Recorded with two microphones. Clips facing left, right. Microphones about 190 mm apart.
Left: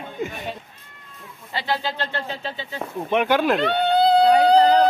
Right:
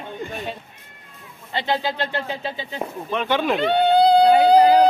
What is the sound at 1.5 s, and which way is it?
Speech, 20° right (ahead or behind).